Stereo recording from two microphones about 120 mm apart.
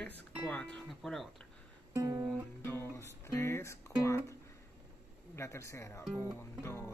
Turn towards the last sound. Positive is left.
turn(degrees=20)  # may be behind; listen again after turning